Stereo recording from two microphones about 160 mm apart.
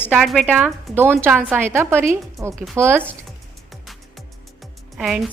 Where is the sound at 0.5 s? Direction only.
15° right (ahead or behind).